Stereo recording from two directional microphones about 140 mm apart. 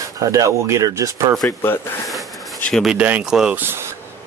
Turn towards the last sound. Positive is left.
turn(degrees=-15)  # may be behind; listen again after turning